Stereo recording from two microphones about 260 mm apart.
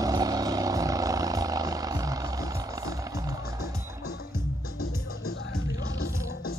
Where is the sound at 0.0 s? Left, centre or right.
Centre.